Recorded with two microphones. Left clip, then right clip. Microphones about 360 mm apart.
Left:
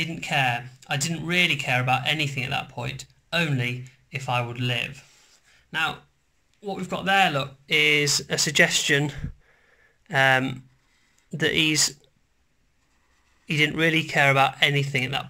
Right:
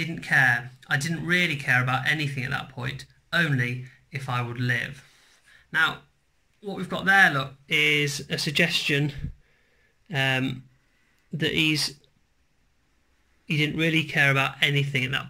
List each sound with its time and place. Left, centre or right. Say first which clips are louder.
0.0 s speech: right 3 dB; centre
13.5 s speech: left 3 dB; centre